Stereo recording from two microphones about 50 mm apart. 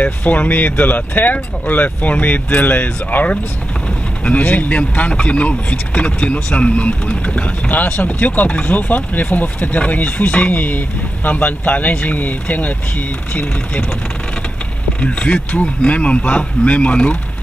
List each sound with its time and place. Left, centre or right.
0.0 s speech: left
15.0 s speech: left